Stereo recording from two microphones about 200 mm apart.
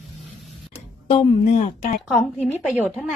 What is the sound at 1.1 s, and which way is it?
Speech, 30° left (ahead or behind).